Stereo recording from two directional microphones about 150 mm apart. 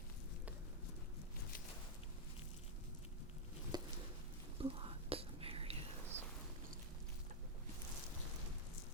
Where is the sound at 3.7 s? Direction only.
25° right (ahead or behind).